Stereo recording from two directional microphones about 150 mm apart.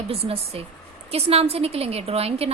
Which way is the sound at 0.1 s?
40° right (ahead or behind).